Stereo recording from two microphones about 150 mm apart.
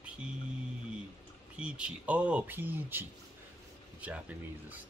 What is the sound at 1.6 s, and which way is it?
Speech, 5° right (ahead or behind).